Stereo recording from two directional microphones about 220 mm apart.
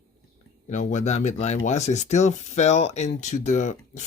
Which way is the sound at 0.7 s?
35° left (ahead or behind).